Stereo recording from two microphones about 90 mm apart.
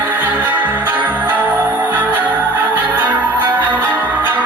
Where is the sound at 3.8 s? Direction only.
20° right (ahead or behind).